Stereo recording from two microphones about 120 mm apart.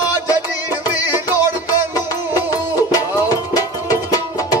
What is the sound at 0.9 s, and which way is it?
Music, 15° right (ahead or behind).